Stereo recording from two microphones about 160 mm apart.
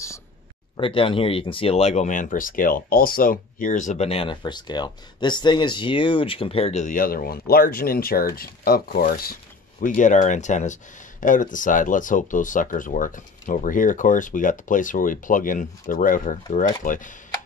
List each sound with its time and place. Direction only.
0.7 s speech: 35° left (ahead or behind); by 17.1 s 55° left (ahead or behind)